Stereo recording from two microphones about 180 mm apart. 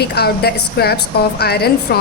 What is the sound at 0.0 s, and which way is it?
A woman's voice, 60° left (ahead or behind).